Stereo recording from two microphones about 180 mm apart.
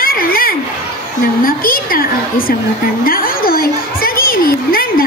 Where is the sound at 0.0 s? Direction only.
55° left (ahead or behind).